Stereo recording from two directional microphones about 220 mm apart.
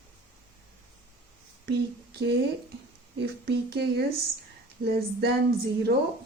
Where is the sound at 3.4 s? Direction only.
50° right (ahead or behind).